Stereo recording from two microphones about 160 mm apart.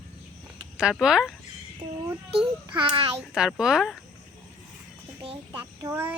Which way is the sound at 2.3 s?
30° right (ahead or behind).